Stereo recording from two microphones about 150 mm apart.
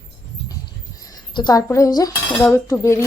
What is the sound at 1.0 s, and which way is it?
Speech, 25° left (ahead or behind).